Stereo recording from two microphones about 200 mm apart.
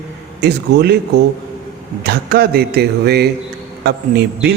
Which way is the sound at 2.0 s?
50° right (ahead or behind).